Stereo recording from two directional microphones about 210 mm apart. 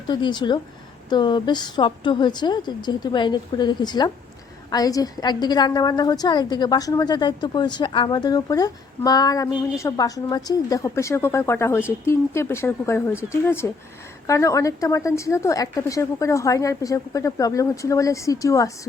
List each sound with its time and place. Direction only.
0.1 s a woman's voice: 20° left (ahead or behind)